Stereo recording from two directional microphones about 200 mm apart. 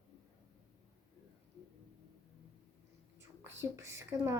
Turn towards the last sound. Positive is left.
turn(degrees=-15)  # may be behind; listen again after turning